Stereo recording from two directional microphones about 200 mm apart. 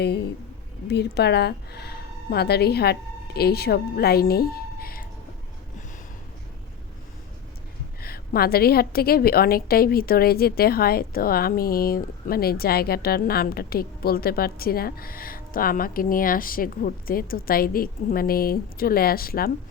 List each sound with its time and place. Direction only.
0.0 s a woman's voice: 55° left (ahead or behind)
8.0 s a woman's voice: 50° left (ahead or behind)